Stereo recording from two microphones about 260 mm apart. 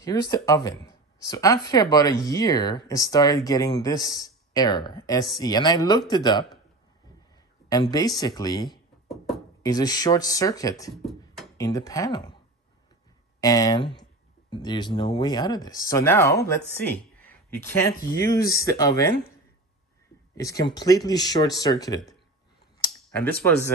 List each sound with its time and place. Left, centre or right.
0.0 s speech: centre
7.7 s speech: centre
9.1 s a sound: centre
9.6 s speech: centre
11.0 s beatboxing: centre
11.5 s speech: centre
13.4 s speech: centre
16.7 s a sound: centre
17.9 s speech: left
18.5 s speech: centre
20.3 s speech: centre